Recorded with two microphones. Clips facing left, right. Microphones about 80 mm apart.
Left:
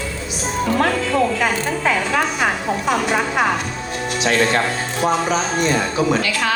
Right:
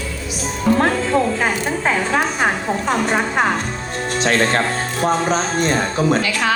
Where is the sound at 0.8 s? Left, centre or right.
Right.